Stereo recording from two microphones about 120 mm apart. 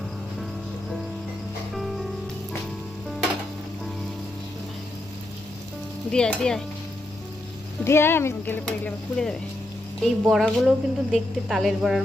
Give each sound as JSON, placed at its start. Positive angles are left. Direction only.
{"t": 6.1, "sound": "stir", "side_deg": 5}
{"t": 7.9, "sound": "speech", "side_deg": 20}
{"t": 8.6, "sound": "a woman's voice", "side_deg": 5}